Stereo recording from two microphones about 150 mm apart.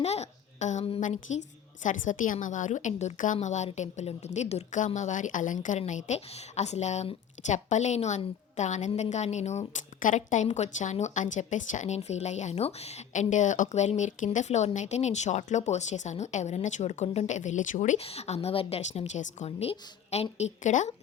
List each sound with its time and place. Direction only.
0.0 s a sound: 45° left (ahead or behind)
1.0 s a woman's voice: 55° left (ahead or behind)
18.0 s a woman's voice: 45° left (ahead or behind)